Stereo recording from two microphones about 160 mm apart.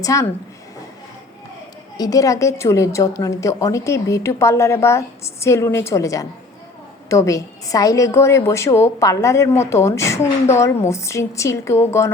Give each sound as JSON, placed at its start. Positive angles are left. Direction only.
{"t": 0.0, "sound": "a woman's voice", "side_deg": 20}
{"t": 2.0, "sound": "a woman's voice", "side_deg": 20}